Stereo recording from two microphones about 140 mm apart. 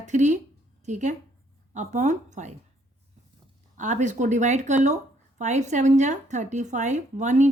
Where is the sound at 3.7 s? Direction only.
60° right (ahead or behind).